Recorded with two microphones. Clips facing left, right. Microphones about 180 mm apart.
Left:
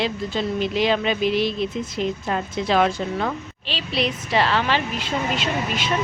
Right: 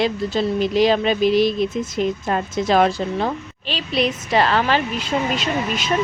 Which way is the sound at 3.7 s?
45° right (ahead or behind).